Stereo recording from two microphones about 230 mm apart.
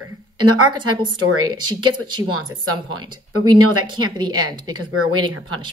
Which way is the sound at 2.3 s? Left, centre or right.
Right.